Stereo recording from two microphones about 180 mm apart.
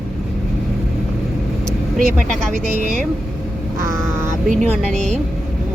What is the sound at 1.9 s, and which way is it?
Speech, 50° right (ahead or behind).